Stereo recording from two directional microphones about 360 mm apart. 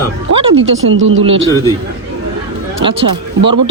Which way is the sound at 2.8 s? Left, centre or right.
Centre.